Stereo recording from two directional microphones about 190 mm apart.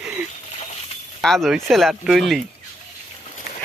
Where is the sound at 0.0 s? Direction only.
5° right (ahead or behind).